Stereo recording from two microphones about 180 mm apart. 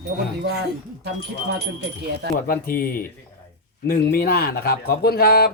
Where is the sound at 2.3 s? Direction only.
55° left (ahead or behind).